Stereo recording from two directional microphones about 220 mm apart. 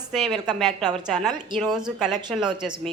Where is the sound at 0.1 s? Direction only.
Centre (ahead or behind).